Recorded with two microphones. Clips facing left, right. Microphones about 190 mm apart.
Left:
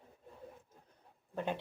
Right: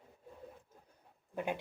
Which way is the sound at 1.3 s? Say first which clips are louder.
Even; 10° right (ahead or behind).